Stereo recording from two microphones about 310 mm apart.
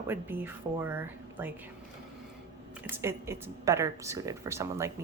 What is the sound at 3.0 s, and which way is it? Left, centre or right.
A woman's voice, centre.